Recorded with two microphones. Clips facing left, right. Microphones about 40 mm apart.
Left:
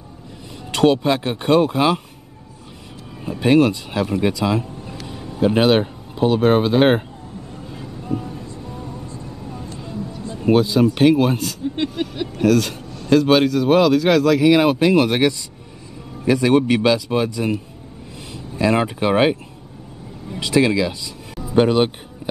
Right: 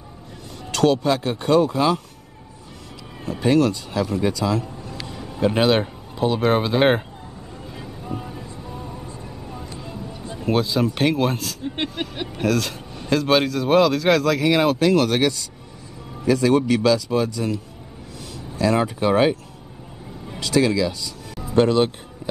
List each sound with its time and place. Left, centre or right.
0.7 s speech: left
3.3 s speech: centre
4.0 s speech: left
4.3 s speech: centre
7.7 s vehicle: centre
8.2 s music: centre
10.4 s a man's voice: centre
11.6 s speech: right
12.4 s a man's voice: centre; by 19.3 s left
20.3 s speech: left